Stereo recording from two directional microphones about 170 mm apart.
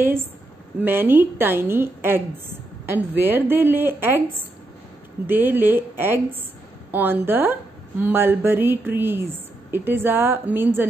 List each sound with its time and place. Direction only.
0.7 s a woman's voice: 10° right (ahead or behind)
5.2 s a woman's voice: 10° right (ahead or behind)